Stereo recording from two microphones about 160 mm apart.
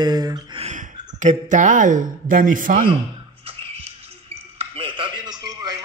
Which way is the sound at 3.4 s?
35° right (ahead or behind).